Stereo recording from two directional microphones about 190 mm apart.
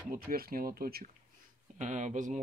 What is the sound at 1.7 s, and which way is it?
Speech, 40° right (ahead or behind).